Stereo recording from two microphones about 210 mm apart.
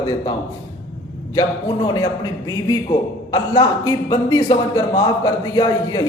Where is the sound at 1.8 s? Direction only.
15° left (ahead or behind).